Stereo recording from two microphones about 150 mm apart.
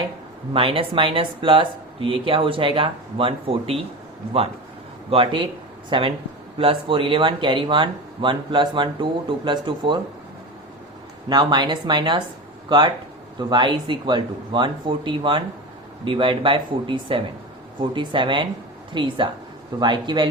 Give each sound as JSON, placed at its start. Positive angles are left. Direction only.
{"t": 0.5, "sound": "speech", "side_deg": -35}
{"t": 5.1, "sound": "speech", "side_deg": -35}
{"t": 11.3, "sound": "speech", "side_deg": -30}